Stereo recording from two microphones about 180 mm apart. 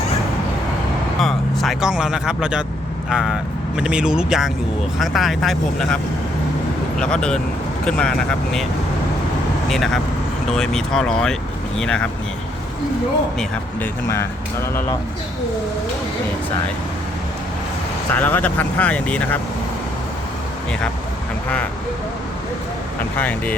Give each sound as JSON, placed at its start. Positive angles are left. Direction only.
{"t": 1.2, "sound": "speech", "side_deg": 0}
{"t": 7.0, "sound": "speech", "side_deg": 5}
{"t": 9.6, "sound": "speech", "side_deg": 0}
{"t": 18.1, "sound": "speech", "side_deg": 10}
{"t": 23.1, "sound": "speech", "side_deg": 10}